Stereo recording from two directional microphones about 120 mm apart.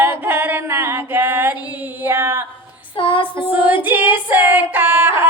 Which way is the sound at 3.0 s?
45° left (ahead or behind).